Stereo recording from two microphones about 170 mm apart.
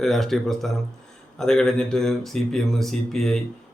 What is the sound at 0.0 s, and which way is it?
A man's voice, centre (ahead or behind).